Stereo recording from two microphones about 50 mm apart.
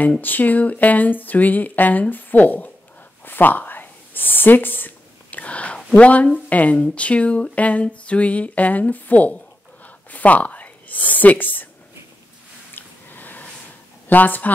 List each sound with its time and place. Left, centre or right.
0.2 s speech: left
3.3 s a sound: left
5.9 s speech: left
12.7 s squish: left
14.0 s a woman's voice: left